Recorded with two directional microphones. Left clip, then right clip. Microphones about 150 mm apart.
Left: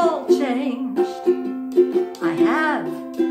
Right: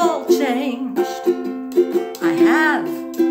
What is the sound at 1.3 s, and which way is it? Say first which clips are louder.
Music: right 1 dB; 30° right (ahead or behind).